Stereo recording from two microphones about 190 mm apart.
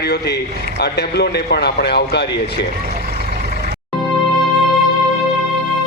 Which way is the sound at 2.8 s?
55° right (ahead or behind).